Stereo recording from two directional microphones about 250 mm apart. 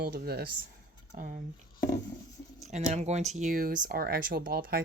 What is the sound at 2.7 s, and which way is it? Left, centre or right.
Speech, right.